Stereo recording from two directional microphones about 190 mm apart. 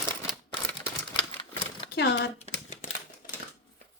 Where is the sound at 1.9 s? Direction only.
60° left (ahead or behind).